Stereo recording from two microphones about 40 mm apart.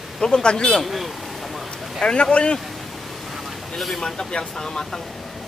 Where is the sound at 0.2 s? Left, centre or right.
Left.